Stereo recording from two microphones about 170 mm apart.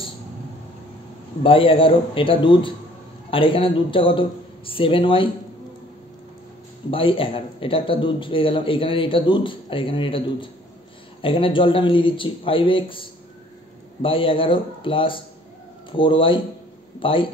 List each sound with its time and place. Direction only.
1.4 s speech: 30° left (ahead or behind)
6.9 s speech: 30° left (ahead or behind)
14.0 s speech: 30° left (ahead or behind)